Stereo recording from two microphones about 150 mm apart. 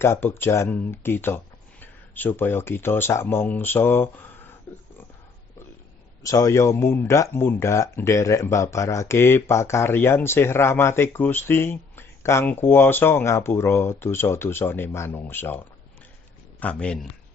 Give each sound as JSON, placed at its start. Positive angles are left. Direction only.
{"t": 0.0, "sound": "speech", "side_deg": 15}
{"t": 6.2, "sound": "speech", "side_deg": 20}